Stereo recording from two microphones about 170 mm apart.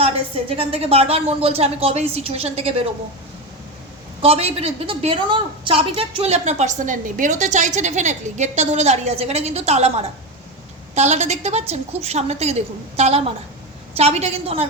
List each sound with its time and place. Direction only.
0.0 s a woman's voice: 35° right (ahead or behind)
4.2 s a woman's voice: 35° right (ahead or behind)